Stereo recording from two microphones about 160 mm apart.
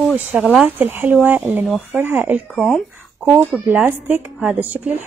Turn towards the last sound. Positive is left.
turn(degrees=-10)  # may be behind; listen again after turning